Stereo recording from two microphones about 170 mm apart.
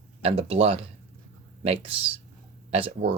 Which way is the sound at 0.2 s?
35° right (ahead or behind).